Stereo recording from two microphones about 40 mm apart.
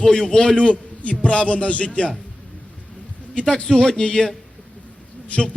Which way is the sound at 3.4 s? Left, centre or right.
Centre.